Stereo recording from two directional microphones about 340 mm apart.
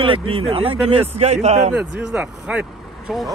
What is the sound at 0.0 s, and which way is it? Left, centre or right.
A man's voice, centre.